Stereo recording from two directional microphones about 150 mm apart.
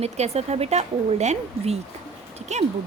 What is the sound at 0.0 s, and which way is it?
Speech, 45° right (ahead or behind).